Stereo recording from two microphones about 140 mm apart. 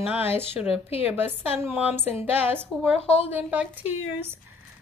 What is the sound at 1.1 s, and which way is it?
Speech, 15° right (ahead or behind).